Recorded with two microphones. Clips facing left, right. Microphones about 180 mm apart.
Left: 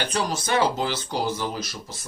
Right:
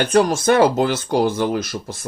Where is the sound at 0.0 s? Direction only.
50° right (ahead or behind).